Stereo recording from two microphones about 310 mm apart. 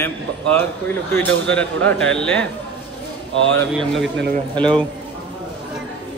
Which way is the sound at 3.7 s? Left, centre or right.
Centre.